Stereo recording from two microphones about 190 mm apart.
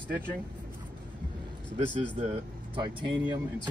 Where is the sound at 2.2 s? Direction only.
30° right (ahead or behind).